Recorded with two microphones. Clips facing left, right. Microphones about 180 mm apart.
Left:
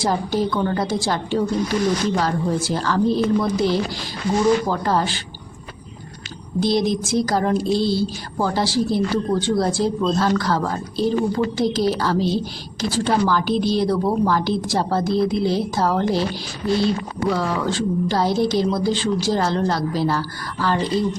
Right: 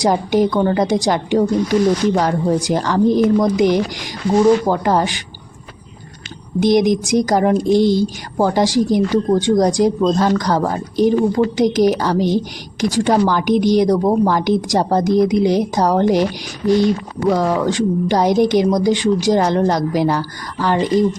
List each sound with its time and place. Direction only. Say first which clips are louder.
0.0 s a woman's voice: right 6 dB; 15° right (ahead or behind)
4.7 s a woman's voice: right 4 dB; 15° right (ahead or behind)
6.6 s a woman's voice: right 6 dB; 20° right (ahead or behind)